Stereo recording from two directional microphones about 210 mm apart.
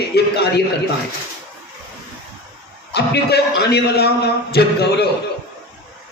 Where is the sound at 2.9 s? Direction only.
50° left (ahead or behind).